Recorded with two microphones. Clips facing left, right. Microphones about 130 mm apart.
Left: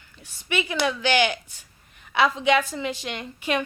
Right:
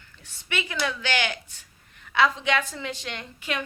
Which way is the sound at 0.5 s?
20° left (ahead or behind).